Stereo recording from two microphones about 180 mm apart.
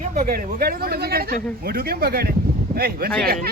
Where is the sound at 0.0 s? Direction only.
45° right (ahead or behind).